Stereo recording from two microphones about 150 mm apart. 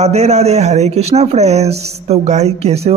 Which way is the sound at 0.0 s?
45° right (ahead or behind).